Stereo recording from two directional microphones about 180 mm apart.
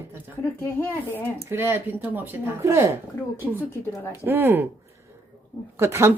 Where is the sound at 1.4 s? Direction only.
15° right (ahead or behind).